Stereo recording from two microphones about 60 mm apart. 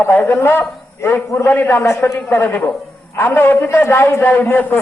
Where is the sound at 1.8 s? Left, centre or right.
Left.